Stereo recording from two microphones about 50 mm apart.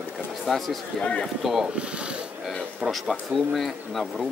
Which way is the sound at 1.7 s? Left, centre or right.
Right.